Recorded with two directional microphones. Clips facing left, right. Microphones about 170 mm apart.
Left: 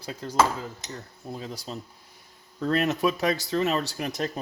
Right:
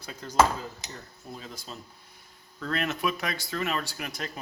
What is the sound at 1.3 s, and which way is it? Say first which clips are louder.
Speech: left 6 dB; 30° left (ahead or behind).